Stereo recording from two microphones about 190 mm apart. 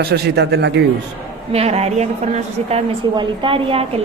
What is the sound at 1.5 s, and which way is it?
A woman's voice, 35° right (ahead or behind).